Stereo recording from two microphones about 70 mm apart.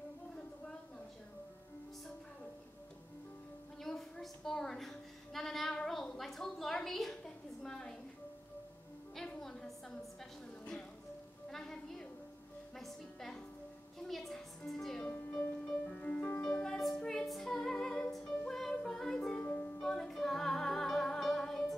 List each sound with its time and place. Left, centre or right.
3.8 s a sound: centre
9.4 s a sound: centre
11.5 s music: centre
16.3 s music: left
16.6 s music: centre
19.3 s music: left
19.8 s music: centre